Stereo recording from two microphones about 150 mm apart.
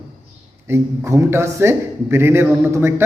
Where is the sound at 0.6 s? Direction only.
15° right (ahead or behind).